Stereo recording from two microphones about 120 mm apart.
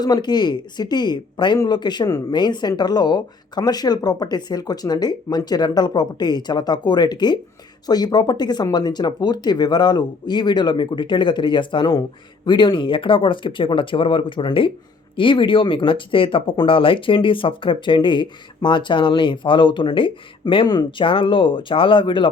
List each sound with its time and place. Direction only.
0.0 s speech: 35° left (ahead or behind)